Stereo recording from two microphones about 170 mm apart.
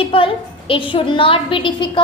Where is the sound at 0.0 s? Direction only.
30° left (ahead or behind).